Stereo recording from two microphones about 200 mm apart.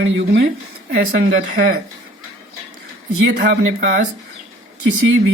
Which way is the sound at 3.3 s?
50° right (ahead or behind).